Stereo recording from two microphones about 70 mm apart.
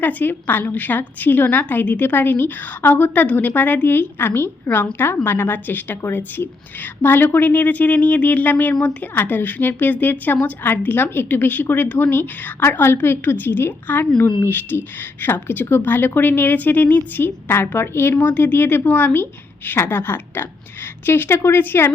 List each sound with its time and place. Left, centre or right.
0.0 s a woman's voice: left